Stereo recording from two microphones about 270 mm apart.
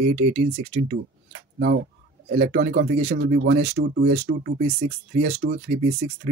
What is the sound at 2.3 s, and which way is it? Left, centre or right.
Speech, right.